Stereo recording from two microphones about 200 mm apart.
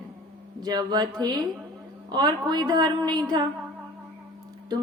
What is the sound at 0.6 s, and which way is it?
Speech, 20° right (ahead or behind).